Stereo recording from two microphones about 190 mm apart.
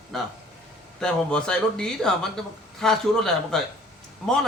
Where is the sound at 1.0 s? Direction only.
5° left (ahead or behind).